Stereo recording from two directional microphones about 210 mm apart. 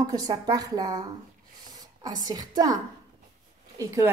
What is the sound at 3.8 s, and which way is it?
Speech, 15° right (ahead or behind).